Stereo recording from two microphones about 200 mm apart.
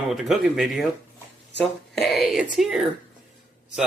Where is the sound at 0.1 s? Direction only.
Centre (ahead or behind).